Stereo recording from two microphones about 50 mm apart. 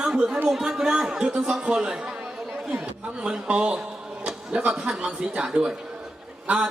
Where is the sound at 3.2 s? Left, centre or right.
Right.